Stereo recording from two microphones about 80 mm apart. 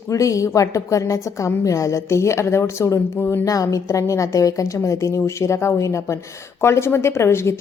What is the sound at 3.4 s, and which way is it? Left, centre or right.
A woman's voice, left.